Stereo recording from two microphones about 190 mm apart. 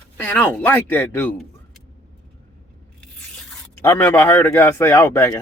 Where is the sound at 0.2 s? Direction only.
10° left (ahead or behind).